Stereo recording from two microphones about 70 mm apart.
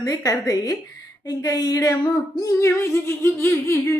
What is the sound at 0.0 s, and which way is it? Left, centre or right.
Speech, left.